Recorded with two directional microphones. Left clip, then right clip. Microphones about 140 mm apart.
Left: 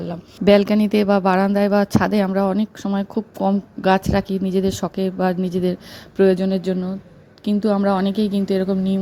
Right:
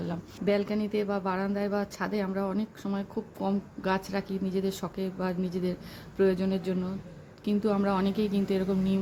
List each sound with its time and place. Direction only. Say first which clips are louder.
0.4 s a woman's voice: left 14 dB; 90° left; by 9.0 s 45° left (ahead or behind)